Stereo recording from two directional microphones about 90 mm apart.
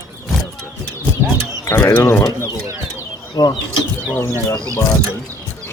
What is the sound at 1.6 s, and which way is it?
Speech, 35° left (ahead or behind).